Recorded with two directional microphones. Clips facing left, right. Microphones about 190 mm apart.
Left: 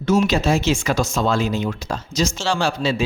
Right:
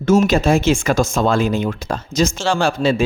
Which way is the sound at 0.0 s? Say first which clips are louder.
Right 4 dB; 50° right (ahead or behind).